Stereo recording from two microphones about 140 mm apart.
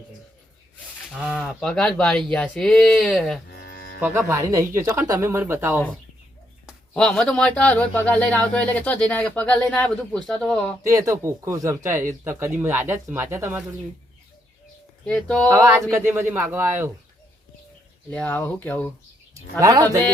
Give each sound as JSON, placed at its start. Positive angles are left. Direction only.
{"t": 1.4, "sound": "speech", "side_deg": 5}
{"t": 4.3, "sound": "speech", "side_deg": -25}
{"t": 6.9, "sound": "speech", "side_deg": 5}
{"t": 10.8, "sound": "speech", "side_deg": -25}
{"t": 15.0, "sound": "speech", "side_deg": 5}
{"t": 15.4, "sound": "speech", "side_deg": -15}
{"t": 18.1, "sound": "speech", "side_deg": 10}
{"t": 19.5, "sound": "speech", "side_deg": -25}